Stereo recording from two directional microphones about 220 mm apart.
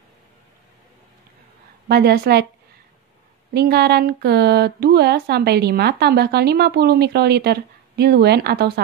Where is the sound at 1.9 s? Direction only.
45° right (ahead or behind).